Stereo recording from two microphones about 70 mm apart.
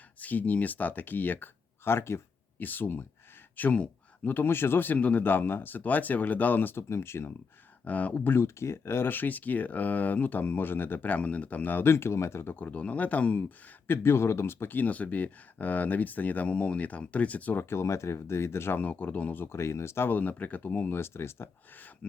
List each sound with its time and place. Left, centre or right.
0.2 s speech: left
7.9 s speech: left
8.4 s speech: left
12.5 s speech: left
13.8 s speech: left